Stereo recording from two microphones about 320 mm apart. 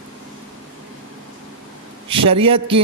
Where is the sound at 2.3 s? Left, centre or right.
Centre.